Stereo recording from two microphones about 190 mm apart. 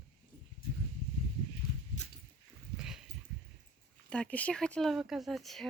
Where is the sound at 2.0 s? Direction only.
40° left (ahead or behind).